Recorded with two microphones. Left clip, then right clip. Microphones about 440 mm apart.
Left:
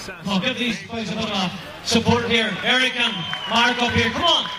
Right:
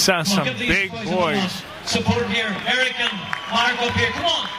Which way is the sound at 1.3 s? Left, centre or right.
Centre.